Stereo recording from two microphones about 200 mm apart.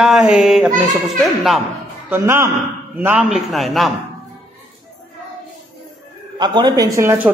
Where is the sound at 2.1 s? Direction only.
10° right (ahead or behind).